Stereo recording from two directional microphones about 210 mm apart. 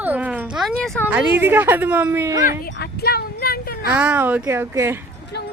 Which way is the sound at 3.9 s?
10° right (ahead or behind).